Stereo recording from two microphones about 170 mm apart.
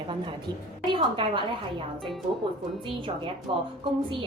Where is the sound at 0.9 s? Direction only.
30° right (ahead or behind).